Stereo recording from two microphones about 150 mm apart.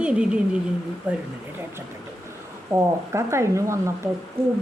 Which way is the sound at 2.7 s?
20° right (ahead or behind).